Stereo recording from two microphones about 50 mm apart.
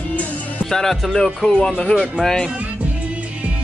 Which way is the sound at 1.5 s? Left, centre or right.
Centre.